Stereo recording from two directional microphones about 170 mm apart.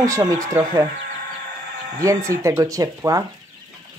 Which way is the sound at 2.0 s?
20° right (ahead or behind).